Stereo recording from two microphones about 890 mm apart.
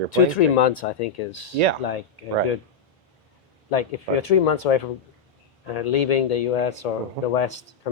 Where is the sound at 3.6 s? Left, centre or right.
Left.